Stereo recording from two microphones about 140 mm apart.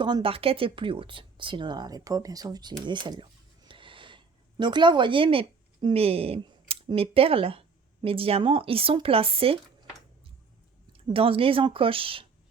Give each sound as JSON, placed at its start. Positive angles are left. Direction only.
{"t": 0.0, "sound": "speech", "side_deg": -35}
{"t": 2.8, "sound": "a sound", "side_deg": -35}
{"t": 8.0, "sound": "speech", "side_deg": -40}
{"t": 10.9, "sound": "speech", "side_deg": -40}